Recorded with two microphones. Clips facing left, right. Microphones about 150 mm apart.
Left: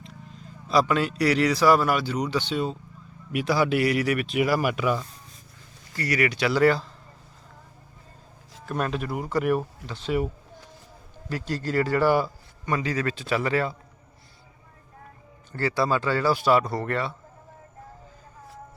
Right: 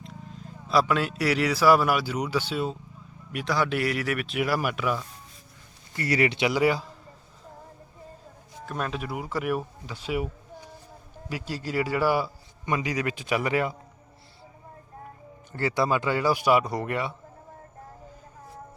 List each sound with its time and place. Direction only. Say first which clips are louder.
0.7 s speech: left 1 dB; 5° right (ahead or behind)
3.3 s speech: left 4 dB; 5° left (ahead or behind)
5.9 s speech: right 1 dB; 25° right (ahead or behind)
8.7 s speech: left 3 dB; centre (ahead or behind)
11.3 s speech: left 3 dB; 10° right (ahead or behind)
15.5 s speech: left 1 dB; 20° right (ahead or behind)